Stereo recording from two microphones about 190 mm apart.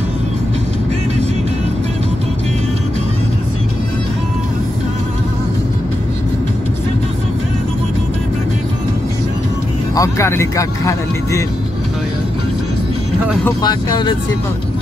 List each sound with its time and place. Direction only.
9.9 s speech: 15° left (ahead or behind)
13.6 s speech: 20° left (ahead or behind)